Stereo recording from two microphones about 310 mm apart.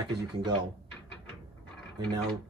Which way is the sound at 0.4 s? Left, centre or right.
Centre.